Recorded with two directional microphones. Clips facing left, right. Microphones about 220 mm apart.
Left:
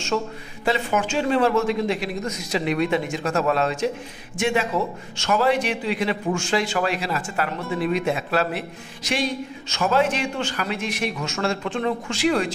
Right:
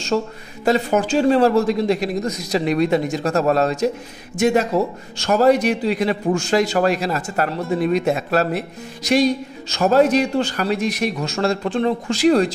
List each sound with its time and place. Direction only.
0.1 s a man's voice: 35° right (ahead or behind)